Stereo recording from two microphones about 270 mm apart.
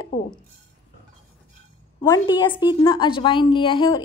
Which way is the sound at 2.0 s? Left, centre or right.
Centre.